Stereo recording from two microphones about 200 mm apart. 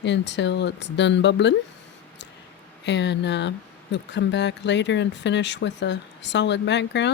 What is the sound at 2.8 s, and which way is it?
Speech, 60° left (ahead or behind).